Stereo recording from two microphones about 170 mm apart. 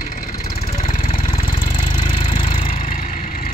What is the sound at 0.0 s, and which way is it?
Vehicle, 55° left (ahead or behind).